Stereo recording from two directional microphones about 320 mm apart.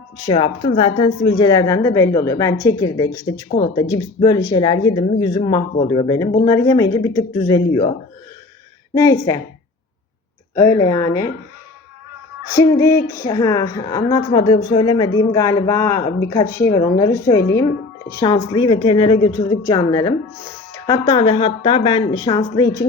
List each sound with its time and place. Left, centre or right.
0.3 s speech: centre
9.0 s speech: centre
10.5 s speech: centre
12.5 s speech: centre